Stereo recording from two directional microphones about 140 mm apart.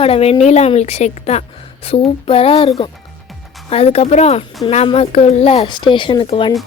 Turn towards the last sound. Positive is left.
turn(degrees=35)  # may be behind; listen again after turning